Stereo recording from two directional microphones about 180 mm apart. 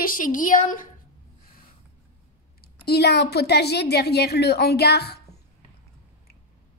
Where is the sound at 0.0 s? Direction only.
50° left (ahead or behind).